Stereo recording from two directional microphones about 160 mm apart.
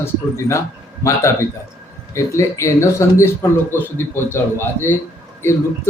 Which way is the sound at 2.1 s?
20° left (ahead or behind).